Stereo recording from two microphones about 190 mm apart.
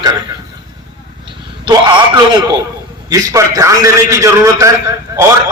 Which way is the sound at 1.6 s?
25° right (ahead or behind).